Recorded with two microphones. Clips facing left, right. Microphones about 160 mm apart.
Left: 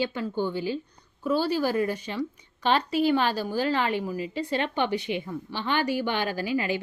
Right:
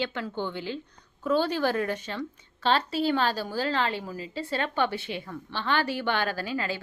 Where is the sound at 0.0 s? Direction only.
10° left (ahead or behind).